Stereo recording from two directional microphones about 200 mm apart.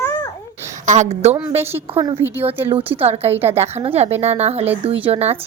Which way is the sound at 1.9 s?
15° right (ahead or behind).